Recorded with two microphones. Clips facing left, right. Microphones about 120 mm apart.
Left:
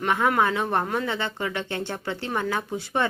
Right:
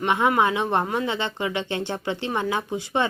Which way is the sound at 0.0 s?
15° right (ahead or behind).